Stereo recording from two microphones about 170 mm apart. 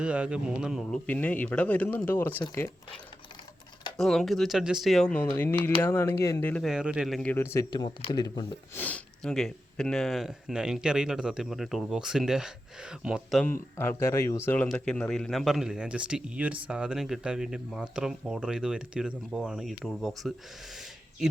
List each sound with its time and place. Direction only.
0.0 s a man's voice: 5° right (ahead or behind); by 2.4 s 10° left (ahead or behind)
3.9 s a man's voice: centre (ahead or behind); by 6.5 s 20° left (ahead or behind)
6.5 s a man's voice: centre (ahead or behind); by 8.4 s 25° left (ahead or behind)
8.7 s speech: 10° left (ahead or behind)
13.4 s speech: 15° left (ahead or behind)